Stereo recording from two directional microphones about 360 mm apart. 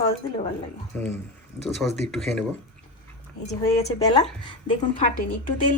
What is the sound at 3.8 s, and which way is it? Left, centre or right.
Speech, centre.